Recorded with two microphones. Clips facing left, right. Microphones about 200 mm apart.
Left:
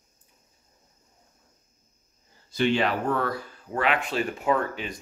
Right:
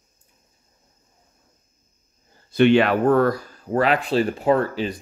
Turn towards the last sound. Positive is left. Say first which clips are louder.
# right 6 dB
turn(degrees=-35)  # may be behind; listen again after turning